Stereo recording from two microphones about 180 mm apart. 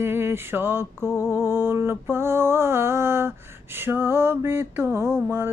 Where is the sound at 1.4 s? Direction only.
10° right (ahead or behind).